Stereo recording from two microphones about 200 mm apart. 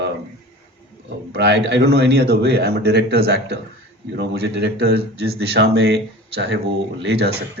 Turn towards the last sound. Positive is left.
turn(degrees=-55)  # may be behind; listen again after turning